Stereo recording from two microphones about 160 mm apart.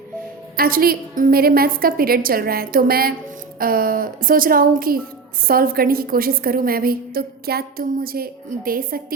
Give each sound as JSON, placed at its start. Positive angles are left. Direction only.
{"t": 0.5, "sound": "a woman's voice", "side_deg": -70}